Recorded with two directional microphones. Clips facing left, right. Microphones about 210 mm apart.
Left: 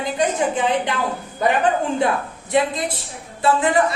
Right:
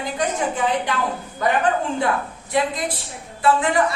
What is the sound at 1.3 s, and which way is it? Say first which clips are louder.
Speech: left 2 dB; 20° left (ahead or behind).